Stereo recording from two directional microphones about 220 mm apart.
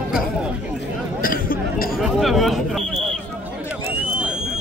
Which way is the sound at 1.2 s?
40° left (ahead or behind).